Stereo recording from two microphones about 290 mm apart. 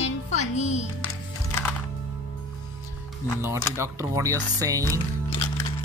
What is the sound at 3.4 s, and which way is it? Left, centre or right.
Speech, centre.